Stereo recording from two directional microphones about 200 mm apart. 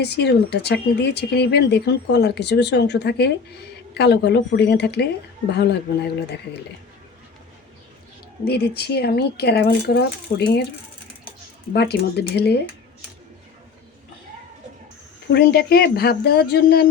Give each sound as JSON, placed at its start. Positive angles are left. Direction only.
{"t": 0.0, "sound": "speech", "side_deg": 55}
{"t": 8.4, "sound": "speech", "side_deg": 55}
{"t": 11.7, "sound": "speech", "side_deg": 55}
{"t": 15.3, "sound": "speech", "side_deg": 50}